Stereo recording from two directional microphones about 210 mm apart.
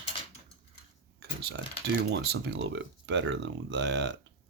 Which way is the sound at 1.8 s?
55° right (ahead or behind).